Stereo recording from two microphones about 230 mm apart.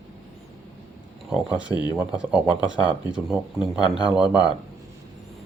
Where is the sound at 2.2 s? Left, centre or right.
Centre.